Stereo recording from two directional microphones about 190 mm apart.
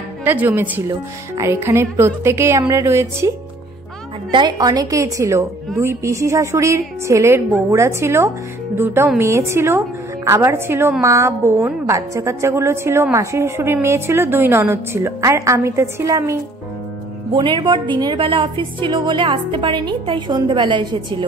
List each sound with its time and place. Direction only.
0.2 s a woman's voice: 10° right (ahead or behind)
4.3 s a woman's voice: 25° right (ahead or behind)
17.3 s a woman's voice: 25° right (ahead or behind)